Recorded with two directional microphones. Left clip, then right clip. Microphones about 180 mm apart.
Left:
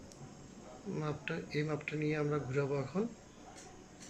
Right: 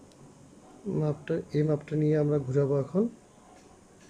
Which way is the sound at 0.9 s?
45° right (ahead or behind).